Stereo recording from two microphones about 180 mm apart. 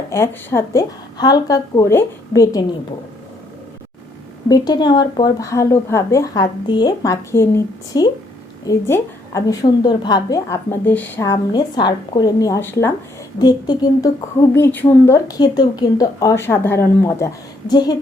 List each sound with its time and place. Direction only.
0.1 s a woman's voice: 15° left (ahead or behind)
4.4 s a woman's voice: 20° left (ahead or behind)
13.4 s a woman's voice: 25° left (ahead or behind)
14.5 s speech: 10° left (ahead or behind)